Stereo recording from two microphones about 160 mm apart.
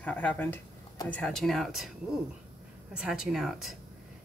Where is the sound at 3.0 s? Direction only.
Centre (ahead or behind).